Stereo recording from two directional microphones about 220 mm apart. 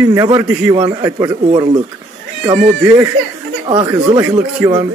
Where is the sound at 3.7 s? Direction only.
15° right (ahead or behind).